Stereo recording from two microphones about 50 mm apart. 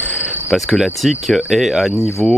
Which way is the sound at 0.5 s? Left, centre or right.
Centre.